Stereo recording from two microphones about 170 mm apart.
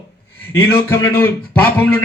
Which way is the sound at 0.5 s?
15° left (ahead or behind).